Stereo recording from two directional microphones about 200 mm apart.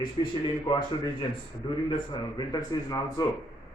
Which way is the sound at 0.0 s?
25° left (ahead or behind).